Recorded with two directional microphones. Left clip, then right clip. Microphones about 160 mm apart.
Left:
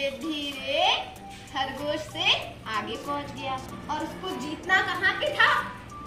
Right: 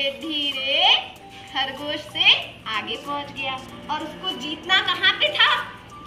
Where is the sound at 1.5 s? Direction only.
5° left (ahead or behind).